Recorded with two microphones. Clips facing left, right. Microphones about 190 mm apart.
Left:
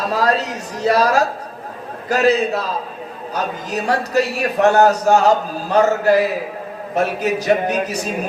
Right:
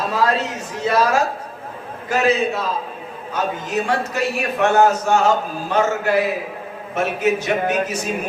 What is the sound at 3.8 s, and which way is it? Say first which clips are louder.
A man's voice: left 8 dB; 35° left (ahead or behind).